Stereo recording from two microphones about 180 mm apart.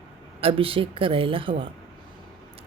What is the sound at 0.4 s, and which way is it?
Speech, 30° right (ahead or behind).